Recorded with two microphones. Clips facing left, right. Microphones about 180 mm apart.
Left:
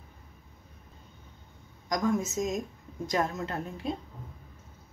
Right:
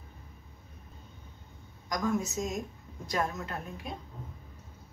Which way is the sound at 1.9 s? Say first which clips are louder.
Left 3 dB; 20° left (ahead or behind).